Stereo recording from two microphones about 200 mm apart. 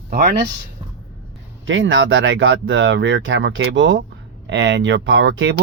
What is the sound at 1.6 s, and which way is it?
Speech, 70° right (ahead or behind).